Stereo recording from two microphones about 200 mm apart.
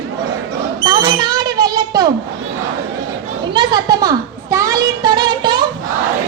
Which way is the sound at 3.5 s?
20° right (ahead or behind).